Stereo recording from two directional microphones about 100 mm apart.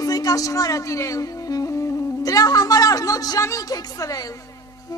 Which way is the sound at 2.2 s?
40° left (ahead or behind).